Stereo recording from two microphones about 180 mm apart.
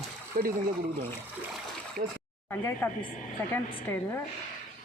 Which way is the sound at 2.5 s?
10° left (ahead or behind).